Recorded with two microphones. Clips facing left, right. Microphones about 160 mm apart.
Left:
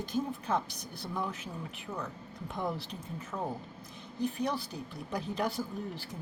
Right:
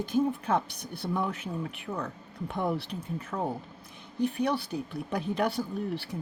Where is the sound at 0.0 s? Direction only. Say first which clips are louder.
Right 7 dB; 55° right (ahead or behind).